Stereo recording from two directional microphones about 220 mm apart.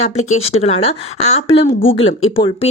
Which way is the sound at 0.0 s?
30° left (ahead or behind).